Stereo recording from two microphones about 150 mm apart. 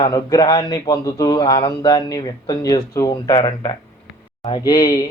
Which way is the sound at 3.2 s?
35° left (ahead or behind).